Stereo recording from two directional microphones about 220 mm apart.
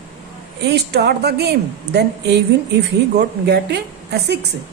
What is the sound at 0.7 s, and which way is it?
A woman's voice, 50° right (ahead or behind).